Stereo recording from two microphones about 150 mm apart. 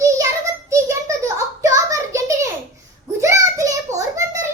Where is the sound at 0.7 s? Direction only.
20° right (ahead or behind).